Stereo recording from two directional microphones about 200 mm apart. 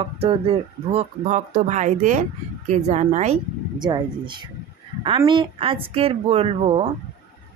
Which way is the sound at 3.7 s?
20° right (ahead or behind).